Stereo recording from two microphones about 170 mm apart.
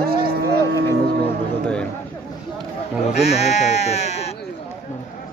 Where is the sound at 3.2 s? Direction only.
40° left (ahead or behind).